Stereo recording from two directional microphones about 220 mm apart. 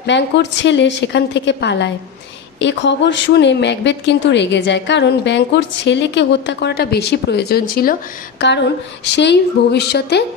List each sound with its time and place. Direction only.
0.0 s a woman's voice: 55° left (ahead or behind)